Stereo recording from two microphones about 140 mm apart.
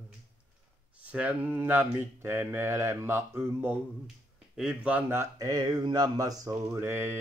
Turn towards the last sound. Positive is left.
turn(degrees=-15)  # may be behind; listen again after turning